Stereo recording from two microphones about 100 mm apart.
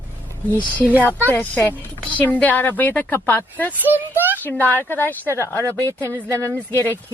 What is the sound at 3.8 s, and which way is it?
Speech, 20° right (ahead or behind).